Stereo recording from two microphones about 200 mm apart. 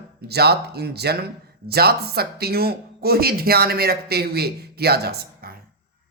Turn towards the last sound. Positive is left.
turn(degrees=-55)  # may be behind; listen again after turning